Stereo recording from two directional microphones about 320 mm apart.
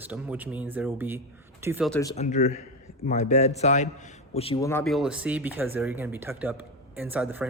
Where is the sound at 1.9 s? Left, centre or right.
Centre.